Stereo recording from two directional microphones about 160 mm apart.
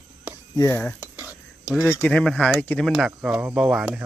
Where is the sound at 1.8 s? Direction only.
10° left (ahead or behind); by 4.0 s 5° right (ahead or behind).